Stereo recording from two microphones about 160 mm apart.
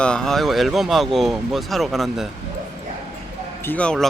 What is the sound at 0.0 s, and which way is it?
Speech, 5° left (ahead or behind).